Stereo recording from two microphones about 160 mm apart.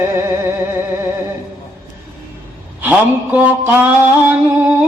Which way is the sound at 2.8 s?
10° right (ahead or behind).